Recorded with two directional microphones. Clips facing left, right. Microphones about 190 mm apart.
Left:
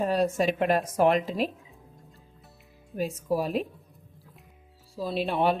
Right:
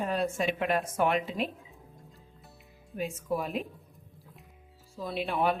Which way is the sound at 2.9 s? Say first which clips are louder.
Left 4 dB; 40° left (ahead or behind).